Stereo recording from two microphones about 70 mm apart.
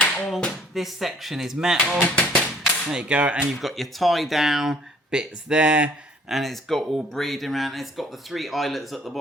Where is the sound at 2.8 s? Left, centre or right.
Centre.